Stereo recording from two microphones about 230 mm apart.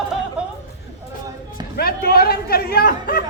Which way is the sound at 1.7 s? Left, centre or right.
Left.